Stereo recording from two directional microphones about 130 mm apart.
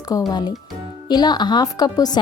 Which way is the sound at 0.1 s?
30° left (ahead or behind).